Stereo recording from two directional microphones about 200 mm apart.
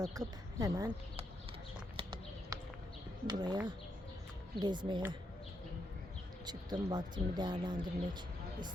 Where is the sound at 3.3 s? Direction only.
20° right (ahead or behind).